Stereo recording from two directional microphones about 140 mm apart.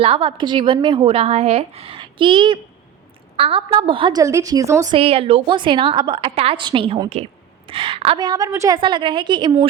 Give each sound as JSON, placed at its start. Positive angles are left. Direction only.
{"t": 0.0, "sound": "a woman's voice", "side_deg": -40}
{"t": 4.2, "sound": "a woman's voice", "side_deg": -25}
{"t": 4.9, "sound": "a woman's voice", "side_deg": -45}
{"t": 8.2, "sound": "a woman's voice", "side_deg": -25}
{"t": 8.8, "sound": "a woman's voice", "side_deg": -35}